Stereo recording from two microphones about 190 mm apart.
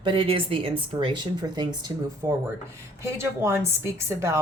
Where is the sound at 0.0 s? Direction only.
25° right (ahead or behind).